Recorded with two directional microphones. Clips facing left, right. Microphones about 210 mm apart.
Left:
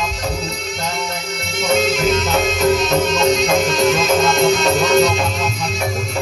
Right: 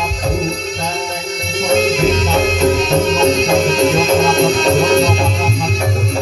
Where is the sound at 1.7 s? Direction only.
30° right (ahead or behind).